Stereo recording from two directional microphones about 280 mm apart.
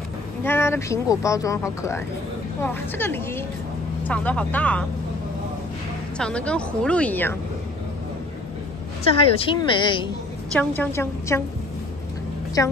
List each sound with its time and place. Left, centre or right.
0.4 s speech: centre
6.1 s speech: centre
9.0 s speech: centre
10.5 s speech: centre
12.6 s speech: centre